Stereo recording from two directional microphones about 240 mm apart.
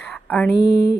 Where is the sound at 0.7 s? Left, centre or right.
Left.